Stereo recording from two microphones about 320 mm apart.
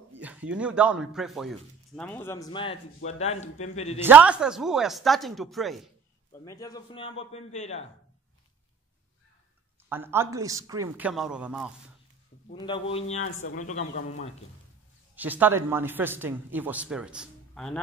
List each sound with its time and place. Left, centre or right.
0.2 s a man's voice: centre; by 4.0 s left
4.0 s a man's voice: centre; by 7.9 s left
9.8 s speech: centre
12.5 s a man's voice: centre
13.5 s speech: left
13.9 s a man's voice: left
15.1 s speech: centre